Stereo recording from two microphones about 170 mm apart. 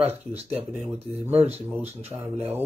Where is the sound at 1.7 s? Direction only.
10° right (ahead or behind).